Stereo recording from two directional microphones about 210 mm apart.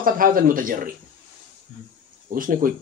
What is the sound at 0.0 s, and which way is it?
Speech, 40° right (ahead or behind).